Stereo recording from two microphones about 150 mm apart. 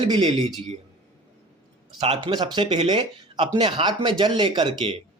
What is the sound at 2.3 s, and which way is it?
Speech, 30° right (ahead or behind).